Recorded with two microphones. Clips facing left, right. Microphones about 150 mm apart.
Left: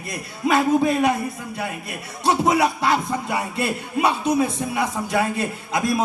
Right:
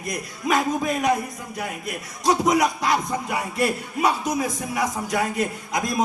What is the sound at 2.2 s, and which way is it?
A man's voice, 30° left (ahead or behind).